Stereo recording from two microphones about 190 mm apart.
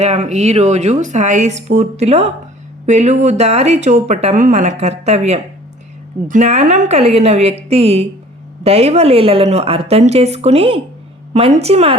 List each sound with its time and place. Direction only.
0.0 s a woman's voice: 40° right (ahead or behind)